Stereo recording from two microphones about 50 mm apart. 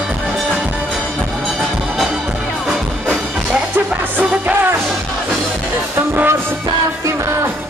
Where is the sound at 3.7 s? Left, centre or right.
Right.